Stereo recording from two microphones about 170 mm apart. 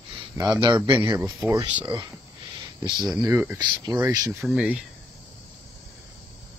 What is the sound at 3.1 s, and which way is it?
Speech, 15° right (ahead or behind).